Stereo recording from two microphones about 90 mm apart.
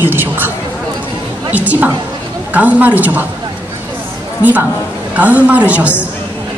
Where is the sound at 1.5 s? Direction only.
15° right (ahead or behind).